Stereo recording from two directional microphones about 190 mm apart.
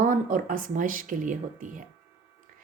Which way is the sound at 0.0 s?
45° right (ahead or behind).